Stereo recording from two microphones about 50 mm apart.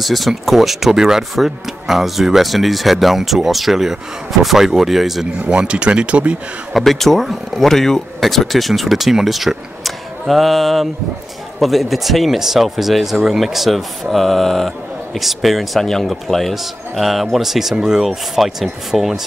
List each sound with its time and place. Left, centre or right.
0.0 s speech: centre
5.5 s speech: right
6.7 s speech: centre